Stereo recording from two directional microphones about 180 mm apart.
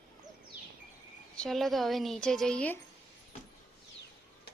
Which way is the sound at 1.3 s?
5° left (ahead or behind).